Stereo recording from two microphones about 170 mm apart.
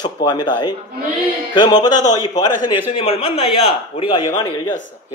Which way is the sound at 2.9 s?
35° left (ahead or behind).